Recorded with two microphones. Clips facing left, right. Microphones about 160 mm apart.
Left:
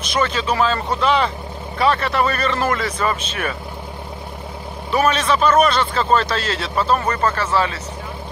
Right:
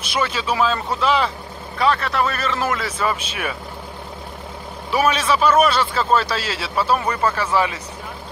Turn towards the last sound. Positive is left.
turn(degrees=-15)  # may be behind; listen again after turning